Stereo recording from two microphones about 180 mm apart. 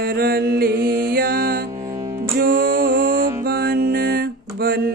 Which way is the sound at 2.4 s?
50° right (ahead or behind).